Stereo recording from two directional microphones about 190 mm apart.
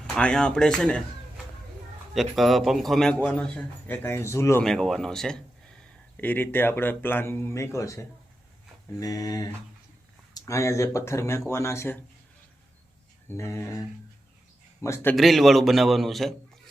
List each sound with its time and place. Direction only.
0.1 s a man's voice: 5° left (ahead or behind)
2.1 s a man's voice: centre (ahead or behind)
4.6 s a man's voice: centre (ahead or behind)
13.2 s speech: 15° left (ahead or behind)
15.1 s a man's voice: centre (ahead or behind)